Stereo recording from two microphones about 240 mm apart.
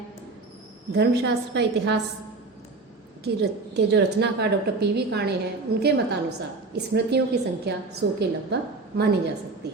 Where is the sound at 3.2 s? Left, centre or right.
Right.